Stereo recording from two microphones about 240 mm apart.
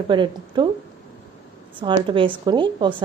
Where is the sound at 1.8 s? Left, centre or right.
Right.